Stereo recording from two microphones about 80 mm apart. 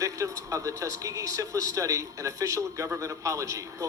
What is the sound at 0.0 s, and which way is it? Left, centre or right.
Speech, right.